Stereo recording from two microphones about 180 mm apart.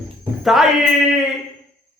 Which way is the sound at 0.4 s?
Centre (ahead or behind).